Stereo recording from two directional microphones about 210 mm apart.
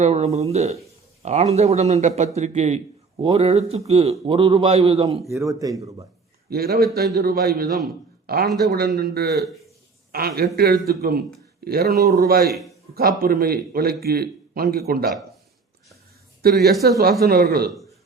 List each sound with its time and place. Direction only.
0.0 s a man's voice: 30° right (ahead or behind)
6.5 s a man's voice: 45° right (ahead or behind)
16.4 s a man's voice: 45° right (ahead or behind)